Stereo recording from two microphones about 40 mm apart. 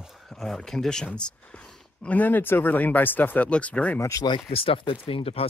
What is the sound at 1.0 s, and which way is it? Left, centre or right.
Speech, left.